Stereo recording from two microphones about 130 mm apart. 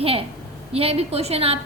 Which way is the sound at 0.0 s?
50° right (ahead or behind).